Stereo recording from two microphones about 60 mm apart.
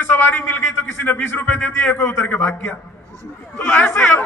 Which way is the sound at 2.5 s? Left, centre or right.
Left.